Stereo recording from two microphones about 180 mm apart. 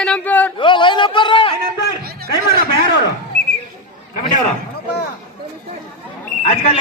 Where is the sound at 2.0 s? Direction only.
60° right (ahead or behind).